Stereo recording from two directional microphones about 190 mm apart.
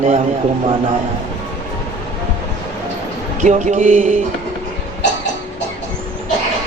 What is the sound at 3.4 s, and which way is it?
Speech, 40° right (ahead or behind).